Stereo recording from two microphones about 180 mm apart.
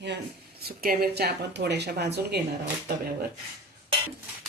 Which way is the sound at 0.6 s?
55° right (ahead or behind).